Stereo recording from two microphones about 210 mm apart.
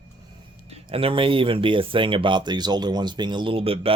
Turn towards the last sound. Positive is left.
turn(degrees=-25)  # may be behind; listen again after turning